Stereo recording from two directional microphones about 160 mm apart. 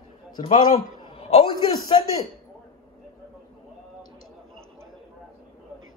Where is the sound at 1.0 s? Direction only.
35° left (ahead or behind).